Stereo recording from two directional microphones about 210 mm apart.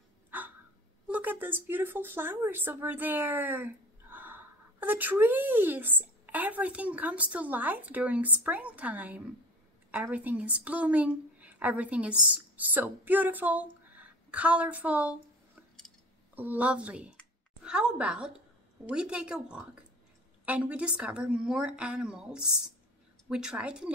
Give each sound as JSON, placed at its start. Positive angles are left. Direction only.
{"t": 0.3, "sound": "a sound", "side_deg": -10}
{"t": 1.0, "sound": "a woman's voice", "side_deg": -5}
{"t": 17.2, "sound": "clicking", "side_deg": -5}
{"t": 18.9, "sound": "a woman's voice", "side_deg": -5}